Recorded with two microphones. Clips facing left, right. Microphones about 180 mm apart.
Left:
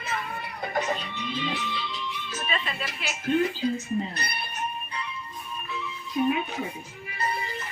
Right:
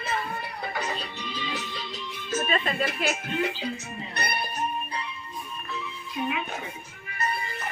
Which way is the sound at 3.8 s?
60° right (ahead or behind).